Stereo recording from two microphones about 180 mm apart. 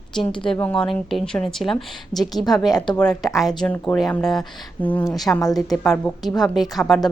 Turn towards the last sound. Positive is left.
turn(degrees=0)  # may be behind; listen again after turning